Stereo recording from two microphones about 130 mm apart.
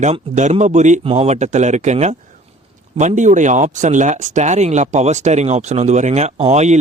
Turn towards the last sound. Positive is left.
turn(degrees=-60)  # may be behind; listen again after turning